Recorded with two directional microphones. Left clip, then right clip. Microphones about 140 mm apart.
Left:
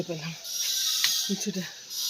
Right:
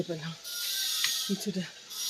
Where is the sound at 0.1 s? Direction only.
5° left (ahead or behind).